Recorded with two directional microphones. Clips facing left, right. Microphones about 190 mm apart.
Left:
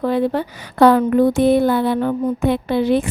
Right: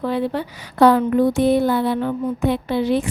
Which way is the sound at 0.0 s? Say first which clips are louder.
Left 4 dB; 45° left (ahead or behind).